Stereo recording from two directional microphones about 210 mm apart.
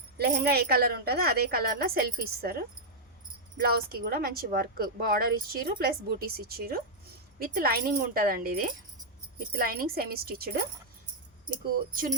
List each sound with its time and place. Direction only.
0.2 s speech: 50° right (ahead or behind)
3.7 s speech: 45° right (ahead or behind)